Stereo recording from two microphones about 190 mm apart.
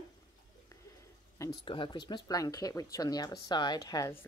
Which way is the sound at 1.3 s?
20° left (ahead or behind).